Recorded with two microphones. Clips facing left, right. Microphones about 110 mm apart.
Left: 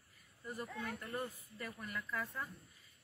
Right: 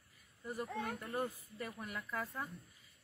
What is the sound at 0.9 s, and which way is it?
Speech, 25° right (ahead or behind).